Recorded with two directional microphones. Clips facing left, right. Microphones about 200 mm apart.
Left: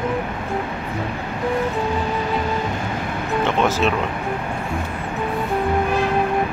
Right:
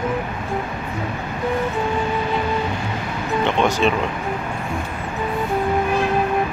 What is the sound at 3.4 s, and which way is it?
Speech, centre (ahead or behind).